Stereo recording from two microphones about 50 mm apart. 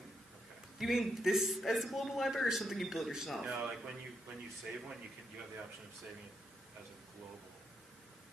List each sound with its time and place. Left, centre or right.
0.7 s a man's voice: centre